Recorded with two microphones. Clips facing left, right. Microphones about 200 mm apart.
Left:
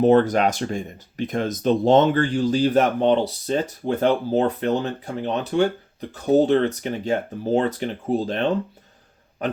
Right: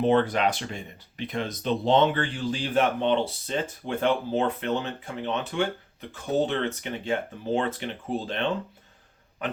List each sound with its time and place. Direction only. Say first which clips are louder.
0.0 s a man's voice: left 6 dB; 40° left (ahead or behind)